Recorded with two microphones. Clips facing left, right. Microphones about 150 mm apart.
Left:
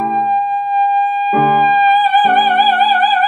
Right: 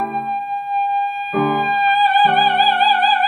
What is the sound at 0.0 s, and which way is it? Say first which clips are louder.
Music: left 7 dB; 40° left (ahead or behind).